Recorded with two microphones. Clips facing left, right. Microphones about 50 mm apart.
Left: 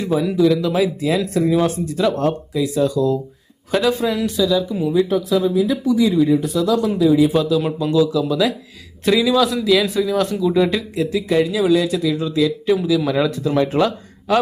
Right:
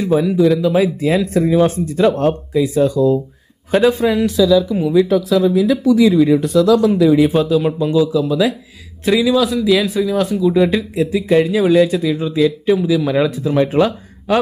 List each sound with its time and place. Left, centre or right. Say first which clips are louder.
0.0 s speech: right 3 dB; centre
0.8 s speech: right 3 dB; right
4.3 s a man's voice: right 6 dB; centre
4.9 s speech: right 3 dB; right
7.0 s speech: left 1 dB; right
7.3 s a man's voice: right 3 dB; right
12.7 s speech: right 2 dB; centre